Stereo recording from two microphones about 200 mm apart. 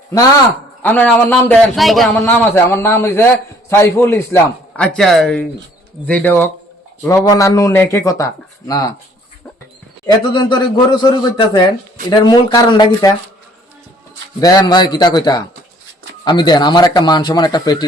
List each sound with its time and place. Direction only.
0.8 s a man's voice: 10° left (ahead or behind)
4.8 s a man's voice: centre (ahead or behind); by 8.9 s 20° left (ahead or behind)
10.3 s speech: 20° left (ahead or behind)
14.4 s speech: 20° left (ahead or behind)